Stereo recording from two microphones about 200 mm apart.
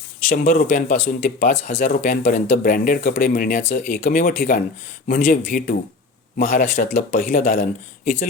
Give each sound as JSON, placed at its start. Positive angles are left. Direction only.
{"t": 0.3, "sound": "speech", "side_deg": 45}